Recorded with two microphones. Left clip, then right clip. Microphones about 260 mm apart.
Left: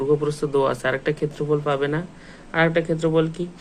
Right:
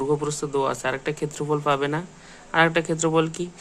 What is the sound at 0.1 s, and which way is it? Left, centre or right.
Speech, centre.